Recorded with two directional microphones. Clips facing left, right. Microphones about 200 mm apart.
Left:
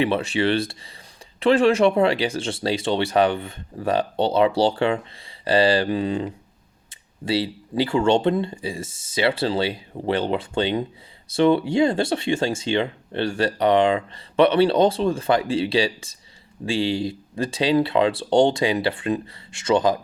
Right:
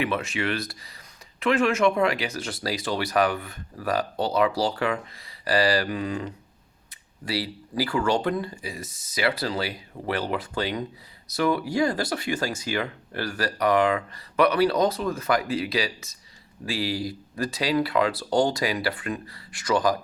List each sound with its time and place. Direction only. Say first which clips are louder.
0.0 s speech: left 6 dB; 30° left (ahead or behind)